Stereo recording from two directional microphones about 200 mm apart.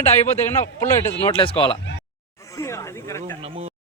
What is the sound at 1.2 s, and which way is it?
Speech, 25° left (ahead or behind).